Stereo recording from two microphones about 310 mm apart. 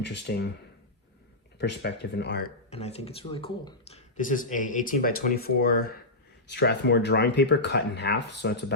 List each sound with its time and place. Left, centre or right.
0.0 s speech: left
1.5 s speech: left
2.6 s speech: centre